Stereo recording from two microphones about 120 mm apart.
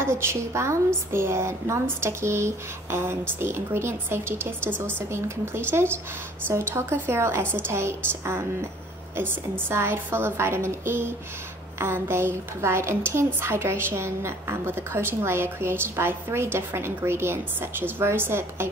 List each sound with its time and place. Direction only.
0.0 s a woman's voice: 20° right (ahead or behind)